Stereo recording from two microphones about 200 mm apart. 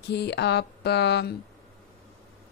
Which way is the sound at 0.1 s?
55° left (ahead or behind).